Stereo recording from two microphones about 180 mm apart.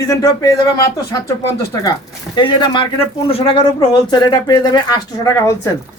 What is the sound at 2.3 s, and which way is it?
Speech, 25° left (ahead or behind).